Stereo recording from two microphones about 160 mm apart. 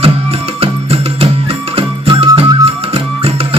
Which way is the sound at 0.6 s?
35° right (ahead or behind).